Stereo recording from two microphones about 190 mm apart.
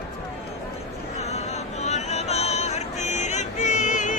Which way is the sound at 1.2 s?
35° left (ahead or behind).